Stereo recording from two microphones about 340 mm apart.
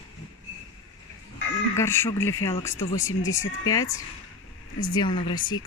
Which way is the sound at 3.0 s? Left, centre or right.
Left.